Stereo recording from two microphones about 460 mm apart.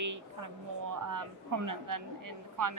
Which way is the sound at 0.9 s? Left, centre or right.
Right.